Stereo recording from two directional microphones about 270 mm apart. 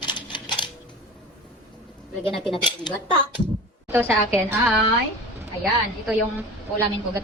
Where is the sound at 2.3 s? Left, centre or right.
Centre.